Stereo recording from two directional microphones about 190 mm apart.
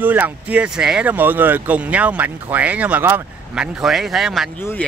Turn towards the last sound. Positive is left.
turn(degrees=10)  # may be behind; listen again after turning